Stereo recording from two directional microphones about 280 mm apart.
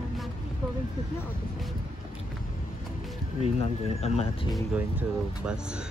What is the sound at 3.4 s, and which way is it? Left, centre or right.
Speech, left.